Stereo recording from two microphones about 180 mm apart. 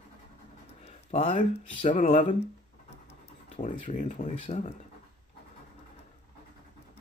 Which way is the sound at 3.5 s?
40° left (ahead or behind).